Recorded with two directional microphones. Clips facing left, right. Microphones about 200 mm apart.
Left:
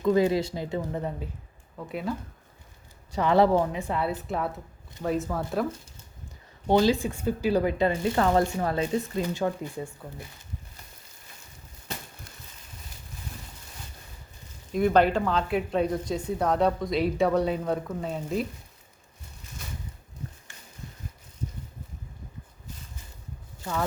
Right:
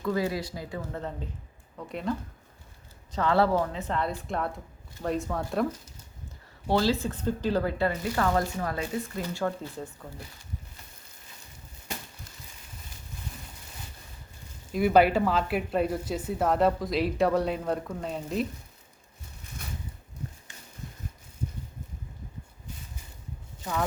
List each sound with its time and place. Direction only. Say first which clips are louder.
0.0 s speech: left 6 dB; 20° left (ahead or behind); by 2.1 s 5° left (ahead or behind)
3.1 s speech: left 3 dB; 15° left (ahead or behind)
6.7 s speech: left 3 dB; 15° left (ahead or behind)
14.7 s speech: even; 5° right (ahead or behind)
20.5 s a sound: right 1 dB; 20° right (ahead or behind)